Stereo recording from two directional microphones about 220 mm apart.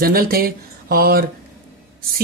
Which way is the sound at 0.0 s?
40° right (ahead or behind).